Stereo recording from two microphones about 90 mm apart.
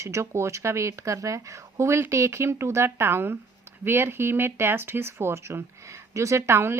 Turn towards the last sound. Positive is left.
turn(degrees=-30)  # may be behind; listen again after turning